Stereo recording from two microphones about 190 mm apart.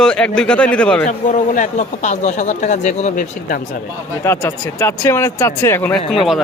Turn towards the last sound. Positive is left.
turn(degrees=0)  # may be behind; listen again after turning